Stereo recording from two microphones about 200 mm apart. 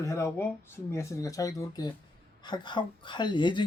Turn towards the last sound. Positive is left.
turn(degrees=25)  # may be behind; listen again after turning